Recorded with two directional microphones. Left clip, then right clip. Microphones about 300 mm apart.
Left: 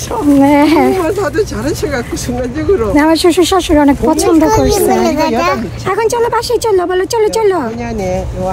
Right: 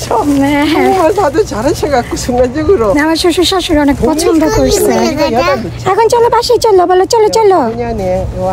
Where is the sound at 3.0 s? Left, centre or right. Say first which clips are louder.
Left 1 dB; centre.